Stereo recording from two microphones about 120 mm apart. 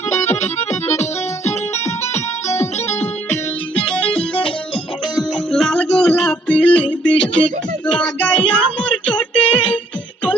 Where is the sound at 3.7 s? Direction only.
10° left (ahead or behind).